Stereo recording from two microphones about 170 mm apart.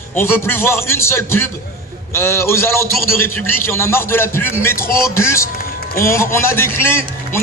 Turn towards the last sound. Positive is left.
turn(degrees=15)  # may be behind; listen again after turning